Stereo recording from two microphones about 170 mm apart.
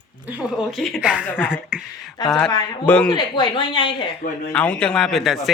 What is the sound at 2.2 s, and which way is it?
Speech, 25° left (ahead or behind).